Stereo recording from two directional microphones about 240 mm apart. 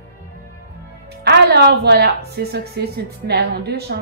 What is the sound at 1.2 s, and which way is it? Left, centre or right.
A woman's voice, right.